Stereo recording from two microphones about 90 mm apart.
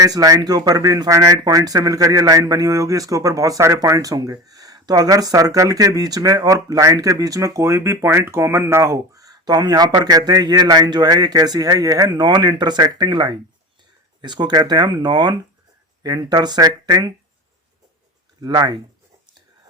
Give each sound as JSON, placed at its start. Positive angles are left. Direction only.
{"t": 0.0, "sound": "speech", "side_deg": -45}
{"t": 18.4, "sound": "speech", "side_deg": -50}